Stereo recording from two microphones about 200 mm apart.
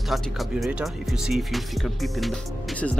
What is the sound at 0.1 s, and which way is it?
Speech, centre (ahead or behind).